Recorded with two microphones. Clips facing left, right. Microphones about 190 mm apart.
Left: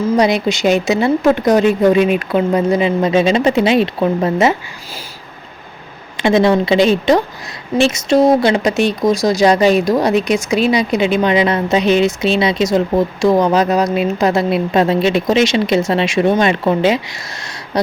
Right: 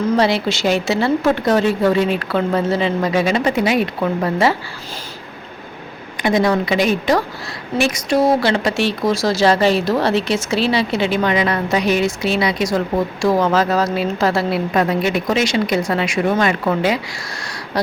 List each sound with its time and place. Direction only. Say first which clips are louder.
0.0 s speech: left 3 dB; 15° left (ahead or behind)
6.1 s speech: left 4 dB; 25° left (ahead or behind)